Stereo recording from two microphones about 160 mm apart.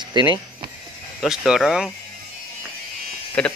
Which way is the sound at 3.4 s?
5° left (ahead or behind).